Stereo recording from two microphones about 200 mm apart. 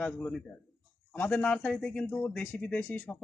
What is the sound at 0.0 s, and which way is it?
Speech, 5° left (ahead or behind).